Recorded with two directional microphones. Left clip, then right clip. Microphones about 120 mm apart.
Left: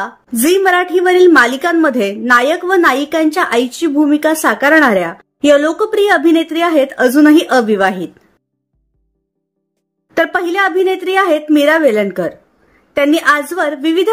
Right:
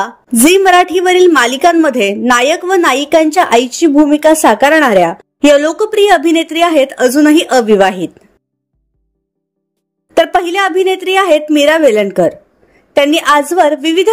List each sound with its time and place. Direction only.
0.0 s a woman's voice: 60° right (ahead or behind)
10.1 s a woman's voice: 45° right (ahead or behind)